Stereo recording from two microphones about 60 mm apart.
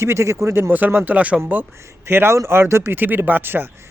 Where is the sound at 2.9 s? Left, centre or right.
Right.